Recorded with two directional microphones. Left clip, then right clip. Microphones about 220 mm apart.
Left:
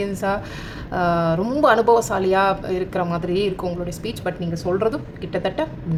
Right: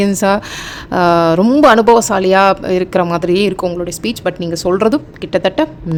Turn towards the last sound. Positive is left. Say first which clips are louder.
# right 9 dB
turn(degrees=-45)  # may be behind; listen again after turning